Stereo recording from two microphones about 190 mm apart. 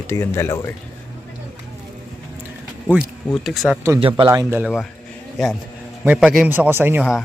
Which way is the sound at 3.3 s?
Centre (ahead or behind).